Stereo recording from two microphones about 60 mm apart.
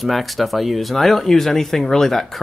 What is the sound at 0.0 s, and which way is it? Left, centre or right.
Speech, centre.